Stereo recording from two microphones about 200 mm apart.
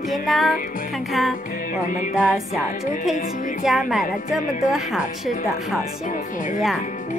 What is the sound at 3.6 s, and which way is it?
Speech, centre (ahead or behind).